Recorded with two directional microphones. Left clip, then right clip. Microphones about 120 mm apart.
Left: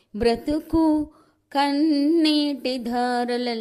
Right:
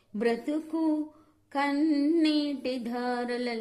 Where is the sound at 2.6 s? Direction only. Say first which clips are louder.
Left 7 dB; 30° left (ahead or behind).